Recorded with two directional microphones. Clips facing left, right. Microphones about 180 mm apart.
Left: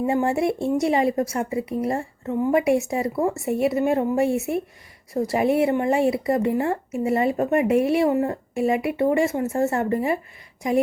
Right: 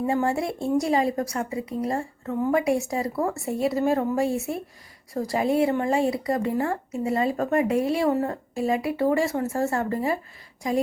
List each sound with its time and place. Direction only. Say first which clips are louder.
0.1 s a woman's voice: left 4 dB; 25° left (ahead or behind)
4.3 s speech: left 4 dB; 60° left (ahead or behind)
5.1 s a woman's voice: left 3 dB; 25° left (ahead or behind)